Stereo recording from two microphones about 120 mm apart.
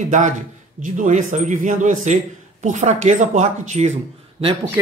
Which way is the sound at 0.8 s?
90° right.